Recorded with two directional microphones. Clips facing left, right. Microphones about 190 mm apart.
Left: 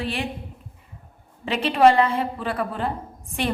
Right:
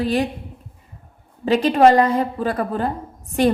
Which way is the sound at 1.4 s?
40° right (ahead or behind).